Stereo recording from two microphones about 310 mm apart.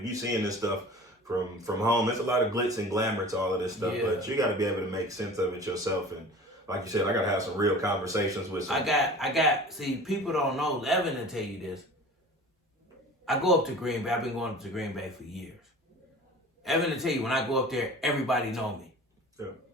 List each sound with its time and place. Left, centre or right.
0.0 s a man's voice: centre
13.2 s a man's voice: centre
16.6 s a man's voice: centre